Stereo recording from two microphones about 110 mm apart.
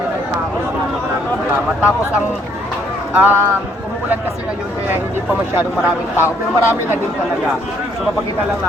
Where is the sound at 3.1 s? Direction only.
15° right (ahead or behind).